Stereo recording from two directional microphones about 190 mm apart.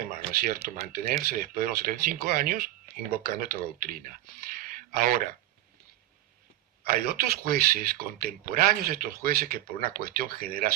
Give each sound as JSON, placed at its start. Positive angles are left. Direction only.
{"t": 0.0, "sound": "speech", "side_deg": -50}
{"t": 6.8, "sound": "speech", "side_deg": -50}